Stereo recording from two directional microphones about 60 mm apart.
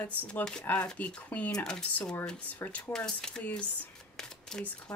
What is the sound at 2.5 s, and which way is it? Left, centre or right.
Speech, left.